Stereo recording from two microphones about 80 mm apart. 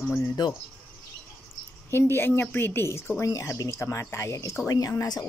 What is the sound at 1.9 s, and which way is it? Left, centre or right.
Speech, left.